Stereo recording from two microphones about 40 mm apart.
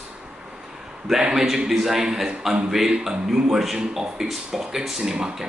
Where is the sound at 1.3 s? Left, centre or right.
Centre.